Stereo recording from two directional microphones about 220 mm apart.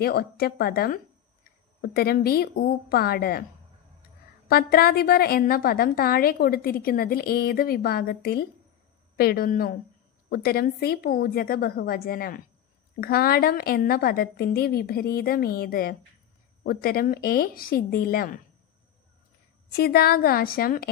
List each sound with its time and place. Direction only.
0.0 s a woman's voice: 45° left (ahead or behind)
4.4 s a woman's voice: 45° left (ahead or behind)
19.7 s a woman's voice: 45° left (ahead or behind)